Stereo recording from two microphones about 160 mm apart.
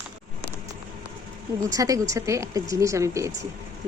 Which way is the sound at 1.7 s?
20° right (ahead or behind).